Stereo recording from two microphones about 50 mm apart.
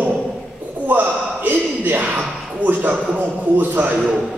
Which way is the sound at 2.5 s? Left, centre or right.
Right.